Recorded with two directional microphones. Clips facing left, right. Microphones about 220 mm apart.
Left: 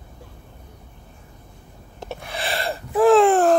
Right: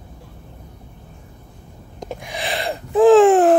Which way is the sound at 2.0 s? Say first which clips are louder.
Right 2 dB; 15° right (ahead or behind).